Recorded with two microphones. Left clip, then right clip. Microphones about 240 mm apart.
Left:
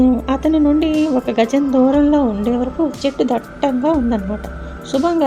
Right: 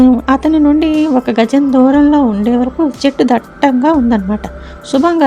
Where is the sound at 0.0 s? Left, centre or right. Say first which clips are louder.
Right 6 dB; right.